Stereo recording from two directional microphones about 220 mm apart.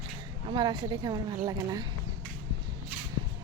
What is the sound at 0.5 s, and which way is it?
A woman's voice, 20° right (ahead or behind).